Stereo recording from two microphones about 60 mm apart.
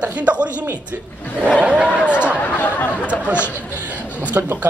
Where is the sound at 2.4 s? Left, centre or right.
Left.